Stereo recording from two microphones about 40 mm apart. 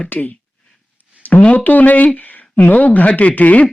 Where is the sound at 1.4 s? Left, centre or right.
Left.